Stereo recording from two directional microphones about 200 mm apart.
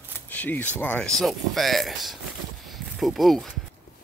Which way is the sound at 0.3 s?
10° left (ahead or behind).